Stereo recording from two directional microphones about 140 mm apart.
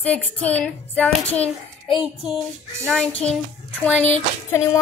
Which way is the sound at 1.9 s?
Centre (ahead or behind).